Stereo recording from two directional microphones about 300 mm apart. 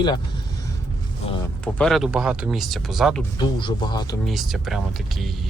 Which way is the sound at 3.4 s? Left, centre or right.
Centre.